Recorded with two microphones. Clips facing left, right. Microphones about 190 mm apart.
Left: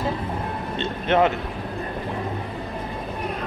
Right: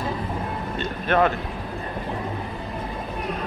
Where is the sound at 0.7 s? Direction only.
25° left (ahead or behind).